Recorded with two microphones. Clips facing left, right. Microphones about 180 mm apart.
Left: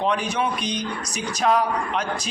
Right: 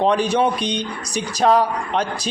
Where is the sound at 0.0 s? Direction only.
35° right (ahead or behind).